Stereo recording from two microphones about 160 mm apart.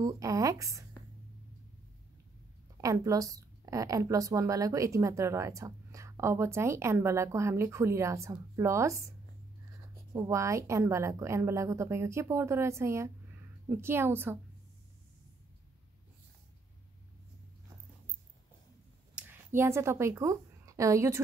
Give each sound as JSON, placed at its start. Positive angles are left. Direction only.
{"t": 0.0, "sound": "a woman's voice", "side_deg": -20}
{"t": 2.8, "sound": "a woman's voice", "side_deg": -20}
{"t": 10.1, "sound": "a woman's voice", "side_deg": -20}
{"t": 19.1, "sound": "a woman's voice", "side_deg": -15}